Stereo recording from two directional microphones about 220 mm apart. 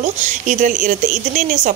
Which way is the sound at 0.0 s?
35° right (ahead or behind).